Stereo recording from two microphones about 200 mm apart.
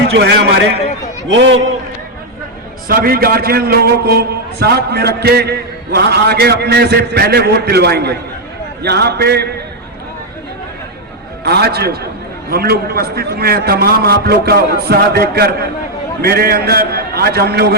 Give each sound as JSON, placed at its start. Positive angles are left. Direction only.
{"t": 0.1, "sound": "a man's voice", "side_deg": -60}
{"t": 2.8, "sound": "a man's voice", "side_deg": -50}
{"t": 11.4, "sound": "a man's voice", "side_deg": -55}